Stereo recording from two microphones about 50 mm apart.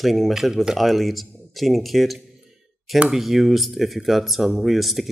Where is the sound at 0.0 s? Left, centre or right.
Centre.